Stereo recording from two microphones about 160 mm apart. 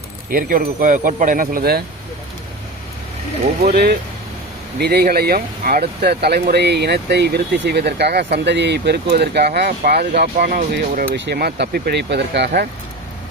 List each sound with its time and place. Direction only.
0.3 s speech: 60° right (ahead or behind)
3.7 s speech: 80° right
4.8 s speech: 90° right